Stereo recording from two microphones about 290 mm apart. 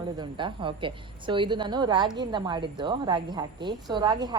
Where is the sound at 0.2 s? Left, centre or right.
Centre.